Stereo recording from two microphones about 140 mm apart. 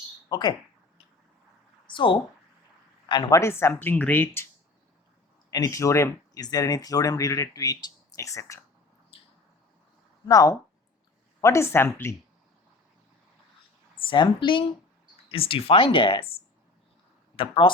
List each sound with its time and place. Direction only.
0.3 s speech: 30° left (ahead or behind)
1.9 s speech: 35° left (ahead or behind); by 4.4 s 15° left (ahead or behind)
5.5 s speech: 25° left (ahead or behind)
10.2 s speech: 25° left (ahead or behind)
14.1 s speech: 35° left (ahead or behind)
17.3 s speech: 40° left (ahead or behind)